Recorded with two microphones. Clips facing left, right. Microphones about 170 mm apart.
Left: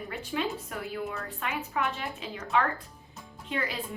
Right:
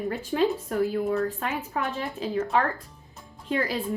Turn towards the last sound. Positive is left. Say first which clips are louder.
# right 6 dB
turn(degrees=-40)  # may be behind; listen again after turning